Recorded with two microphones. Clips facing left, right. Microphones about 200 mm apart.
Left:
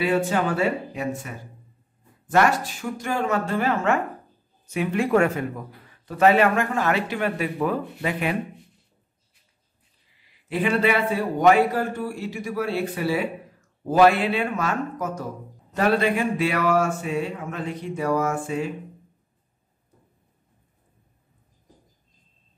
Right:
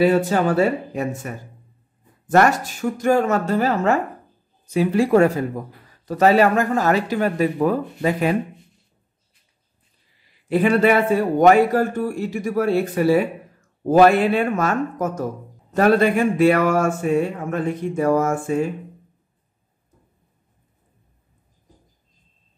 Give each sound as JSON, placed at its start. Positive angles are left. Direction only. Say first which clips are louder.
{"t": 0.0, "sound": "a man's voice", "louder": "right 5 dB", "side_deg": -40}
{"t": 10.5, "sound": "speech", "louder": "right 6 dB", "side_deg": -45}